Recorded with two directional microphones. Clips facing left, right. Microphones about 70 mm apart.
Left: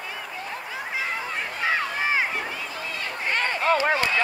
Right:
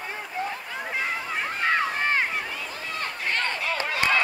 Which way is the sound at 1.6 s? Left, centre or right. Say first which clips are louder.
Right 1 dB; centre.